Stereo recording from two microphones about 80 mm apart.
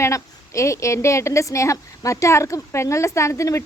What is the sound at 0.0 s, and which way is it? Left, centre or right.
A woman's voice, left.